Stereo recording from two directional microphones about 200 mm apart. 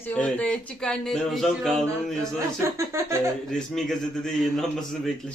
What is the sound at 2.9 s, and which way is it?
Speech, 15° right (ahead or behind).